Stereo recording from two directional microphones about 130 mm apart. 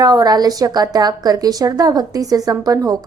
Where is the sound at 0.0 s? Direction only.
30° right (ahead or behind).